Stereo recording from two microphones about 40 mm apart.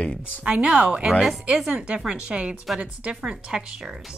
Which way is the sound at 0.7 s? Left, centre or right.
Centre.